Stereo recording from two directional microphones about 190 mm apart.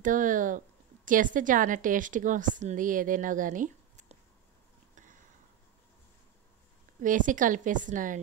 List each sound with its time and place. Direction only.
0.0 s a woman's voice: 45° right (ahead or behind)
7.0 s a woman's voice: 45° right (ahead or behind)